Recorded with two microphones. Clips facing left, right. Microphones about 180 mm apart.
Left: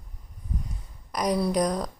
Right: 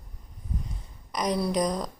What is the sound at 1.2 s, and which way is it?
Speech, 10° left (ahead or behind).